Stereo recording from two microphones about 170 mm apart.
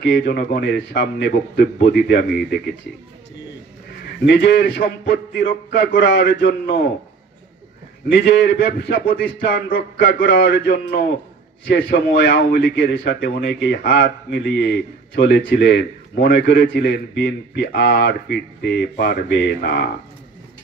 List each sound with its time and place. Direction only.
0.2 s a man's voice: 60° left (ahead or behind)
4.3 s a man's voice: 75° left (ahead or behind); by 6.8 s 60° left (ahead or behind)
8.1 s a man's voice: 85° left; by 19.9 s 70° left (ahead or behind)